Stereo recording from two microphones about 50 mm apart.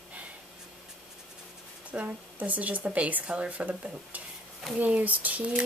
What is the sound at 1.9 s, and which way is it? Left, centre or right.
Speech, right.